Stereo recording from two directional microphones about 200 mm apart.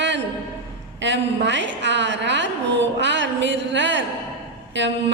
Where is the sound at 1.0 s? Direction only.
65° right (ahead or behind).